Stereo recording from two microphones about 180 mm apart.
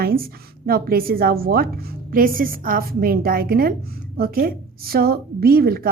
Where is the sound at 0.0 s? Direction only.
55° right (ahead or behind).